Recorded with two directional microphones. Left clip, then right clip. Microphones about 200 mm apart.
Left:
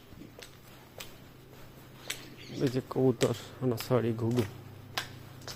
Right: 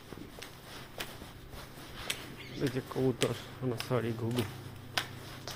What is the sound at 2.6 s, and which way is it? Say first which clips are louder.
Speech: left 4 dB; 55° left (ahead or behind).